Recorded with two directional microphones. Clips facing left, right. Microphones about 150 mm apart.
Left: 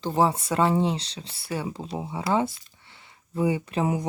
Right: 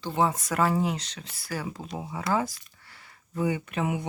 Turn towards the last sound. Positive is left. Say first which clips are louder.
# left 3 dB
turn(degrees=35)  # may be behind; listen again after turning